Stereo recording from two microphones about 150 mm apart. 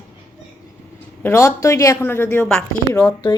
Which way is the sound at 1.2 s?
20° left (ahead or behind).